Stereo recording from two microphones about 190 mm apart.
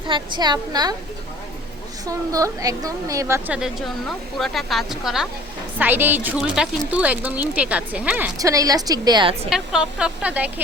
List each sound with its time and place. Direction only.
0.1 s a woman's voice: 20° right (ahead or behind)
2.0 s a woman's voice: 15° right (ahead or behind)
9.5 s a woman's voice: 5° right (ahead or behind)